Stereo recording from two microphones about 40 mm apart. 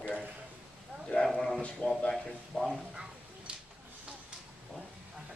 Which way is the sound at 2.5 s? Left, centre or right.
Centre.